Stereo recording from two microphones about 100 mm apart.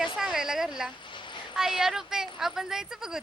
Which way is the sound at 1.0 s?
50° left (ahead or behind).